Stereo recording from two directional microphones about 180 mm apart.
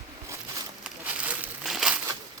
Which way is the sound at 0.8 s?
5° right (ahead or behind).